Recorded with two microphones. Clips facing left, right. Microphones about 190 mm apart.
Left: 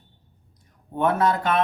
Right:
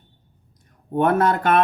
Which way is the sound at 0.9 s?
55° right (ahead or behind).